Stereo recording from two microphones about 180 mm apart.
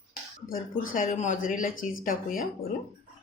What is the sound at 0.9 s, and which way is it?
Speech, 45° left (ahead or behind).